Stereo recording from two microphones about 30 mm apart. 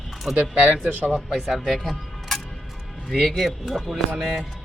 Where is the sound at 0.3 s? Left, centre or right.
Right.